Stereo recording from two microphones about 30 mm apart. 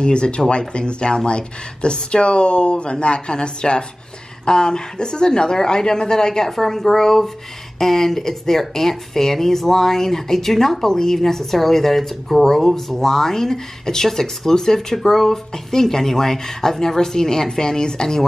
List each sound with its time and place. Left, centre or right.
0.0 s a woman's voice: left
6.5 s speech: centre